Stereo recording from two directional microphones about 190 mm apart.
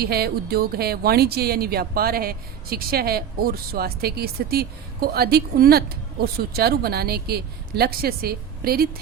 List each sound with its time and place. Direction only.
0.0 s speech: 55° right (ahead or behind)